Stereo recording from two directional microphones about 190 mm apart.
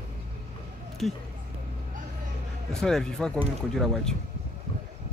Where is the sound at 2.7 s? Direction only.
Centre (ahead or behind).